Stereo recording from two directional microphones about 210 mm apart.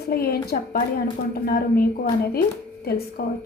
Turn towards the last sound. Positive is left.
turn(degrees=50)  # may be behind; listen again after turning